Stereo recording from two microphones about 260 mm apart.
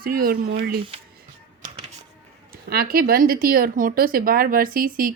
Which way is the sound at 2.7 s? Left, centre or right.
Right.